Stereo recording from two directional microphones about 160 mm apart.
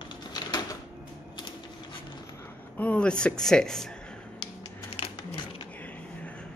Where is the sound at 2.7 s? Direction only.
10° left (ahead or behind).